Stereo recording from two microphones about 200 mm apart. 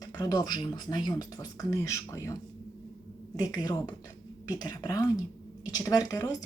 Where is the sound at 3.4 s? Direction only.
20° left (ahead or behind).